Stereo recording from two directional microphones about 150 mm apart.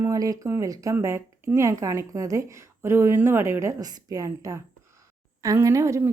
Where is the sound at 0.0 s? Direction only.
25° right (ahead or behind).